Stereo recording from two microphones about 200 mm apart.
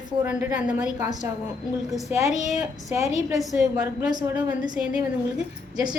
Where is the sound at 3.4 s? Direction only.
Centre (ahead or behind).